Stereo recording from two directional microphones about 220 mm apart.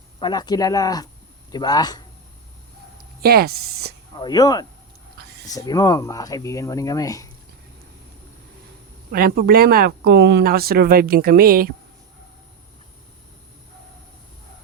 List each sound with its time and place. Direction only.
0.2 s speech: 20° left (ahead or behind)
3.2 s speech: 45° right (ahead or behind)
4.1 s speech: 20° left (ahead or behind)
9.1 s speech: 40° right (ahead or behind)